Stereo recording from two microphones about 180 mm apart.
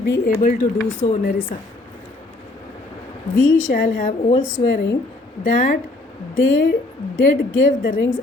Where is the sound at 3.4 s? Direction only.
90° left.